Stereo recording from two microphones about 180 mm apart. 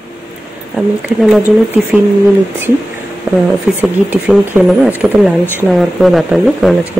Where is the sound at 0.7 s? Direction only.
Centre (ahead or behind).